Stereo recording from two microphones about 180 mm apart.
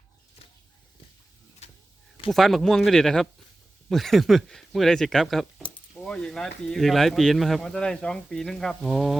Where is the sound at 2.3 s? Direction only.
Centre (ahead or behind).